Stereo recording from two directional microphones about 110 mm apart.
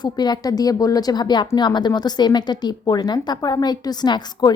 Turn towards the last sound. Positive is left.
turn(degrees=40)  # may be behind; listen again after turning